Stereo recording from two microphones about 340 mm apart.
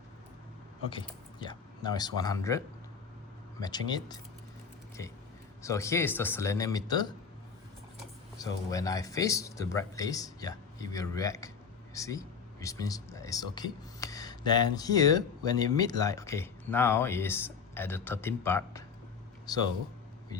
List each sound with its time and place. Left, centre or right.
1.0 s speech: centre
3.6 s speech: centre
5.6 s speech: centre
8.4 s speech: centre